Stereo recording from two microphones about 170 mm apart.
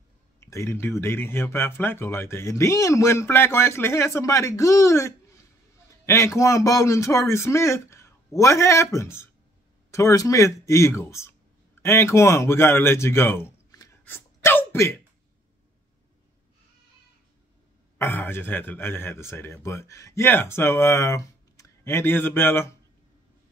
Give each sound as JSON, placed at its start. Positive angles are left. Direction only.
{"t": 0.4, "sound": "speech", "side_deg": 15}
{"t": 14.0, "sound": "a sound", "side_deg": 15}
{"t": 17.9, "sound": "speech", "side_deg": 15}